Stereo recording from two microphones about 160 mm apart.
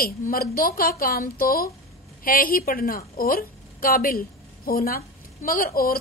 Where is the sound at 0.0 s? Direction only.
65° left (ahead or behind).